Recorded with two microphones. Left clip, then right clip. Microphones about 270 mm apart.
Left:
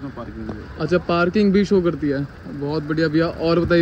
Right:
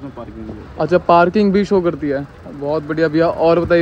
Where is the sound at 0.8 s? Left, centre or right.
Centre.